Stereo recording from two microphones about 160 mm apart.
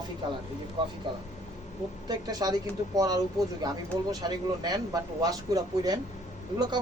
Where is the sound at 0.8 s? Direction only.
30° right (ahead or behind).